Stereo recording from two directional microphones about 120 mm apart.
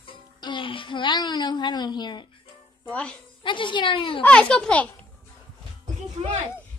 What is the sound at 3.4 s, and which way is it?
Speech, 40° left (ahead or behind).